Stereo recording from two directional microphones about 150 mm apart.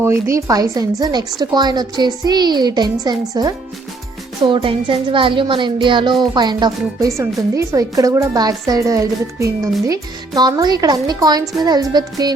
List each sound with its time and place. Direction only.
0.0 s a child's voice: 20° right (ahead or behind)